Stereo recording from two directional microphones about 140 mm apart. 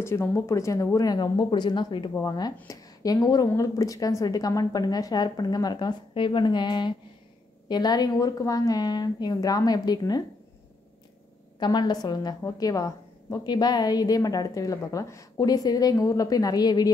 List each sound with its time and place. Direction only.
0.0 s a woman's voice: 20° left (ahead or behind)
11.6 s a woman's voice: 30° left (ahead or behind)